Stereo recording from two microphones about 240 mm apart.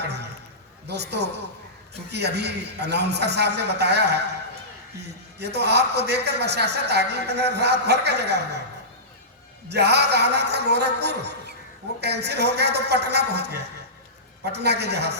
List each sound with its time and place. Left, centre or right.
0.0 s a sound: right
0.9 s a man's voice: right
9.6 s a man's voice: right